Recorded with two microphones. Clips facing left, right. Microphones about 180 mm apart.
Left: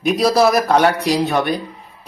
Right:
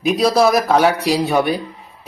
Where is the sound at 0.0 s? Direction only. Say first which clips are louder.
Even; centre (ahead or behind).